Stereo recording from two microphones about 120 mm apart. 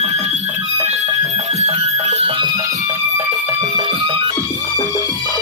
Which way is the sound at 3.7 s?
45° right (ahead or behind).